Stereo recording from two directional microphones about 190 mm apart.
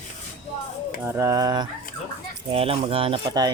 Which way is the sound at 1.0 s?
15° right (ahead or behind).